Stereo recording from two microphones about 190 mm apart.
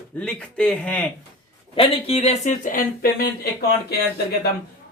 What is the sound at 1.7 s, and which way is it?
Speech, 30° left (ahead or behind).